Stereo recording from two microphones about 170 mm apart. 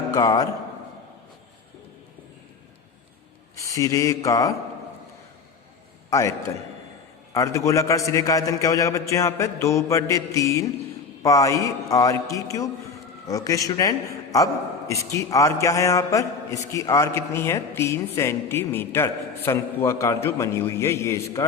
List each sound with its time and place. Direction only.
0.1 s a man's voice: 25° left (ahead or behind)
3.5 s a sound: 20° left (ahead or behind)
6.1 s a man's voice: 15° left (ahead or behind)
7.3 s a man's voice: 20° left (ahead or behind)